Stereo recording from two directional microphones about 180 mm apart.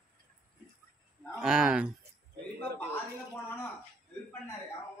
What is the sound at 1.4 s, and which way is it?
Speech, 5° right (ahead or behind).